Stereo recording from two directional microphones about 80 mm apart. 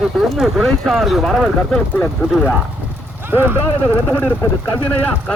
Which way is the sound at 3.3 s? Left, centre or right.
Right.